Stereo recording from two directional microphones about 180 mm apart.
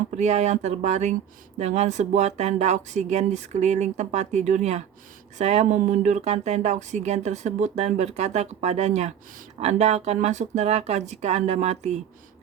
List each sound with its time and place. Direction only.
0.2 s speech: 40° right (ahead or behind)